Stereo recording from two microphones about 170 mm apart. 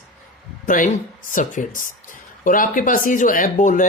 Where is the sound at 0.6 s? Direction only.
55° left (ahead or behind).